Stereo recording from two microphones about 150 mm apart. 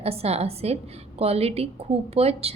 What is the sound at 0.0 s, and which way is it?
A woman's voice, 40° right (ahead or behind).